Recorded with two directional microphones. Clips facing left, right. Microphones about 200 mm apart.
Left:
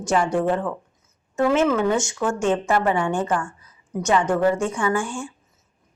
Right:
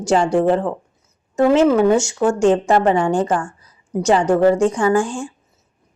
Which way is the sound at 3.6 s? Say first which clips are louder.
Right 7 dB; 35° right (ahead or behind).